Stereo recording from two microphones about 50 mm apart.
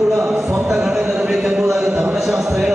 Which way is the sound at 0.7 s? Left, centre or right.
Centre.